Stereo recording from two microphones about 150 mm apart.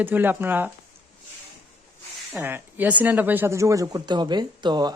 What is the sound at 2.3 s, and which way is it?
Speech, 15° right (ahead or behind).